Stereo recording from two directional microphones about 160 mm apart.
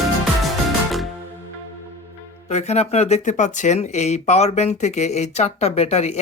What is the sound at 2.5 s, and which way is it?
Speech, 45° left (ahead or behind).